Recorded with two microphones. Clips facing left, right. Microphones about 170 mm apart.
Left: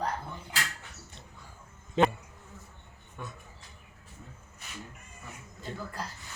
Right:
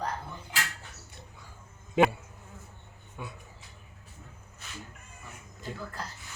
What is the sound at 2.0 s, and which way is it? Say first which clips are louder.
Speech: right 2 dB; 10° right (ahead or behind).